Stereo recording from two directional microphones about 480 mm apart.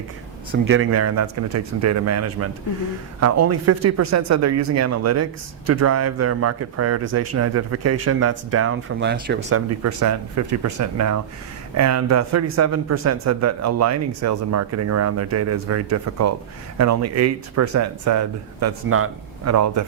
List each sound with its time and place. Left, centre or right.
0.7 s speech: right